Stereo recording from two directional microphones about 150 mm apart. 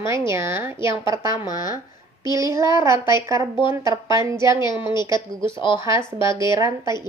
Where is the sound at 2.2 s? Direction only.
20° right (ahead or behind).